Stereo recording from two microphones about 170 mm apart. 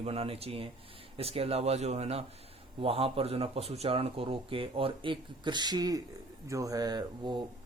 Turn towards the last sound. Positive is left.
turn(degrees=-25)  # may be behind; listen again after turning